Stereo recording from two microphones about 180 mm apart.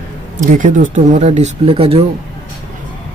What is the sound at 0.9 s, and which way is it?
Speech, 40° right (ahead or behind).